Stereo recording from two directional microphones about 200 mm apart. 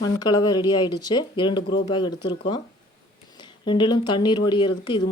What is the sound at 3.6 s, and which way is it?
Speech, 25° left (ahead or behind).